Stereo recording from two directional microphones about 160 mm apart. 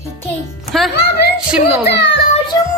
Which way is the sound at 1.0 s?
90° left.